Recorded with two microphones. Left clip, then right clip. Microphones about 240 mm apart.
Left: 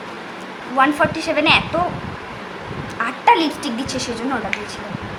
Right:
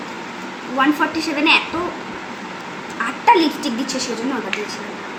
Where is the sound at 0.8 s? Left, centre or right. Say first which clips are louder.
Left 1 dB; left.